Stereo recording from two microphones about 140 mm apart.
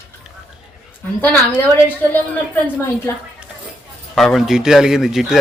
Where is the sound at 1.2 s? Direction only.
10° left (ahead or behind).